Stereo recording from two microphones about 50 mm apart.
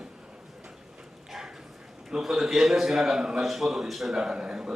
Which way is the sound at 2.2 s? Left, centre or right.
Centre.